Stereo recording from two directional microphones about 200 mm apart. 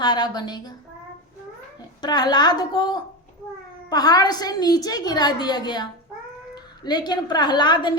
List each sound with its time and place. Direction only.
0.0 s a woman's voice: 20° left (ahead or behind)
2.0 s a woman's voice: 20° left (ahead or behind)